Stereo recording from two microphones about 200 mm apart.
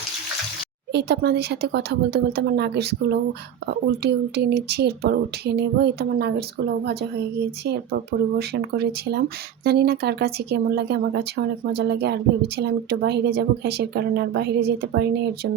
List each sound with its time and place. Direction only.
0.9 s speech: 55° right (ahead or behind)
7.6 s speech: 55° right (ahead or behind)